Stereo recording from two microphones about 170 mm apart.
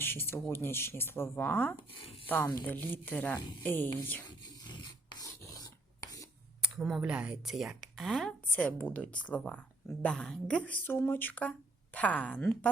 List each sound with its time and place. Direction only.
0.0 s speech: 15° left (ahead or behind)
4.6 s filing: 25° left (ahead or behind)
6.6 s speech: 5° right (ahead or behind)